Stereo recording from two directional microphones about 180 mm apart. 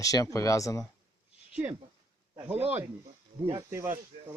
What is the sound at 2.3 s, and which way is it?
Speech, 10° right (ahead or behind).